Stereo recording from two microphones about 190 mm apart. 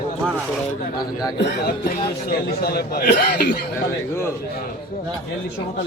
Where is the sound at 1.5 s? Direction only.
55° left (ahead or behind).